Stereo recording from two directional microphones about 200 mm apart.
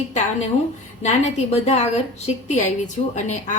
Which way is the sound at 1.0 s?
35° left (ahead or behind).